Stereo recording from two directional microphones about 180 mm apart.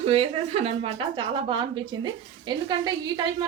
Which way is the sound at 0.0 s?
35° right (ahead or behind).